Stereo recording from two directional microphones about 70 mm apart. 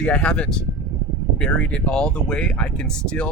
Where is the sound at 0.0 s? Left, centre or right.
Centre.